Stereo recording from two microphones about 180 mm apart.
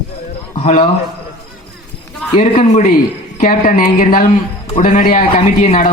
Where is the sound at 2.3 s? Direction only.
45° left (ahead or behind).